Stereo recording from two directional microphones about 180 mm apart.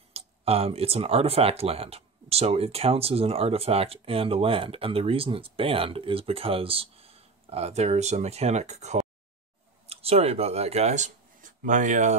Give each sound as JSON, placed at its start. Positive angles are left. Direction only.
{"t": 0.1, "sound": "speech", "side_deg": -35}